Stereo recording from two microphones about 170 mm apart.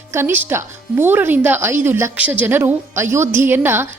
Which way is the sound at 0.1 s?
15° right (ahead or behind).